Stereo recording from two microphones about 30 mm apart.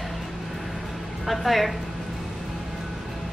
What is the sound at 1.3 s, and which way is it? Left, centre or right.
Speech, centre.